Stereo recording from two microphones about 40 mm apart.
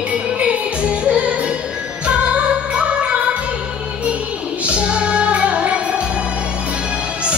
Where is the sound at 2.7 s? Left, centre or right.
Right.